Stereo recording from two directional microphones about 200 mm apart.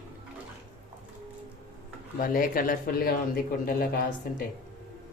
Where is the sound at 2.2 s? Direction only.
45° left (ahead or behind).